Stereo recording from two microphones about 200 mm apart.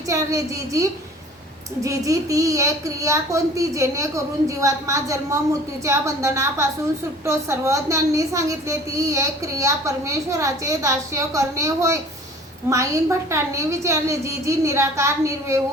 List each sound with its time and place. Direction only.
0.1 s a child's voice: 15° right (ahead or behind)